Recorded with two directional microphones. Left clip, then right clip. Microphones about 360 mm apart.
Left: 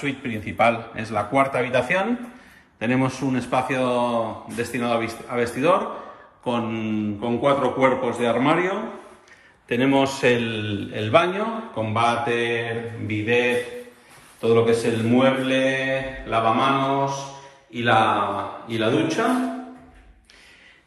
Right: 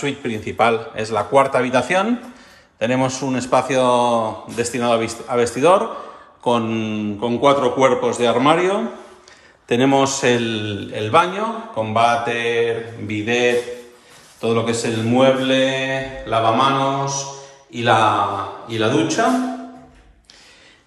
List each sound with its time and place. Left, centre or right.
0.0 s a man's voice: centre